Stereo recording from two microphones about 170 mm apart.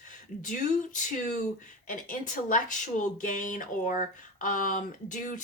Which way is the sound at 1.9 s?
50° left (ahead or behind).